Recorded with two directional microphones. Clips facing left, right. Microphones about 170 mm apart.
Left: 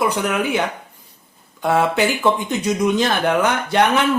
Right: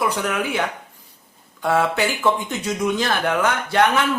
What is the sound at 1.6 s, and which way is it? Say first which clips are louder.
Speech: left 2 dB; 20° left (ahead or behind).